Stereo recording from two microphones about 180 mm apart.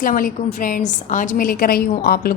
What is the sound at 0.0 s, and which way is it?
A woman's voice, 50° left (ahead or behind).